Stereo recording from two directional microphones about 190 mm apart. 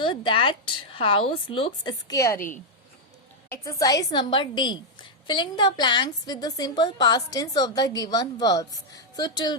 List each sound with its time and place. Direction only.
0.0 s a woman's voice: 25° left (ahead or behind)
3.5 s a woman's voice: 15° left (ahead or behind)